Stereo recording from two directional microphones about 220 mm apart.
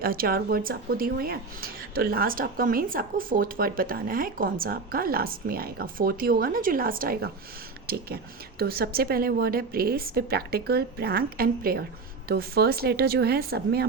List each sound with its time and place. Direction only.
0.0 s a woman's voice: 40° right (ahead or behind)